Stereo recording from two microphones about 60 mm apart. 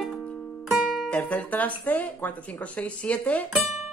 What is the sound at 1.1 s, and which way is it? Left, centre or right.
Speech, left.